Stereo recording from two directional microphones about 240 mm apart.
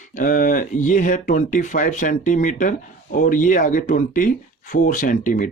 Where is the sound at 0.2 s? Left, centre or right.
Left.